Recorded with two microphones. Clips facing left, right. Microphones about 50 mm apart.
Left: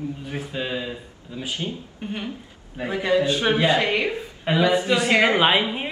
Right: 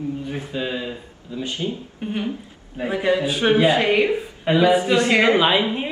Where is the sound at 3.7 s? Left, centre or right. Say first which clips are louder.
Right 3 dB; right.